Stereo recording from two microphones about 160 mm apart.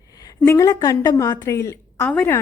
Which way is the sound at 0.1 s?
25° left (ahead or behind).